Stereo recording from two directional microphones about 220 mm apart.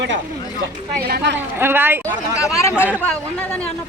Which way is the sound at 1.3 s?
10° right (ahead or behind).